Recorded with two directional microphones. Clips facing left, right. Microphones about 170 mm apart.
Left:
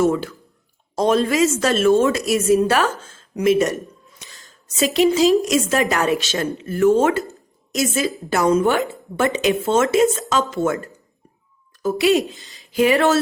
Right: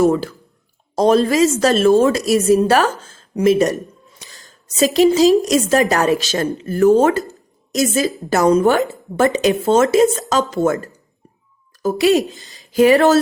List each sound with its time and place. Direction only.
0.0 s a woman's voice: 35° right (ahead or behind)
4.2 s a sound: 35° right (ahead or behind)
4.8 s a woman's voice: 40° right (ahead or behind)